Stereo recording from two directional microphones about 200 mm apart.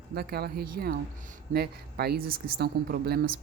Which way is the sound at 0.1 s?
50° right (ahead or behind).